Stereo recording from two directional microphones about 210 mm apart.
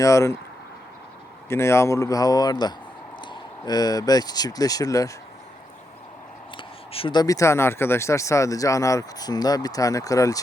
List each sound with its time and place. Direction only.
0.0 s speech: 15° left (ahead or behind)
1.5 s speech: 15° left (ahead or behind)
6.6 s speech: 25° left (ahead or behind)